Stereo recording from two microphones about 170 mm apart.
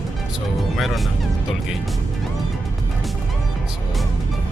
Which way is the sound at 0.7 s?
Centre (ahead or behind).